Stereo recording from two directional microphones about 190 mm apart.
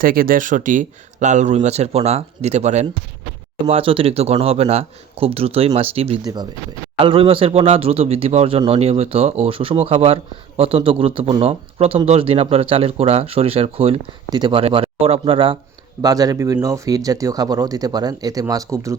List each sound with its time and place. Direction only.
0.0 s speech: 50° right (ahead or behind); by 18.9 s 15° right (ahead or behind)